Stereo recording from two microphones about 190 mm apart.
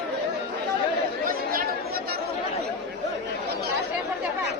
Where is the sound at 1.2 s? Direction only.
50° right (ahead or behind).